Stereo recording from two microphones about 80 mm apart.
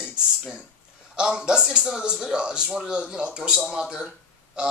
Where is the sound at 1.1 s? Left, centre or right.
Centre.